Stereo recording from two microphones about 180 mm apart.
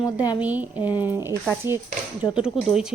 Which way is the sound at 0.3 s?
10° right (ahead or behind).